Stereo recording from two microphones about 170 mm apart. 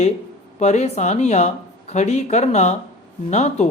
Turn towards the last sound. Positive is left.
turn(degrees=40)  # may be behind; listen again after turning